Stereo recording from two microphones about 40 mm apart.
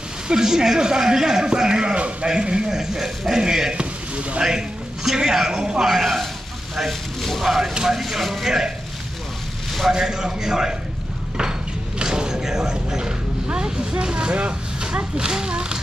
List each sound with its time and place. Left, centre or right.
0.3 s a man's voice: centre
3.7 s a sound: right
4.4 s a man's voice: centre
9.8 s a man's voice: centre
12.0 s mechanisms: centre
13.7 s speech: right